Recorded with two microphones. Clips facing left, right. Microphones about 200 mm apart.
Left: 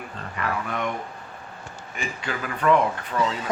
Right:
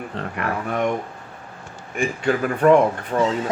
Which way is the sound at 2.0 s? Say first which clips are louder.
Right 10 dB; 50° right (ahead or behind).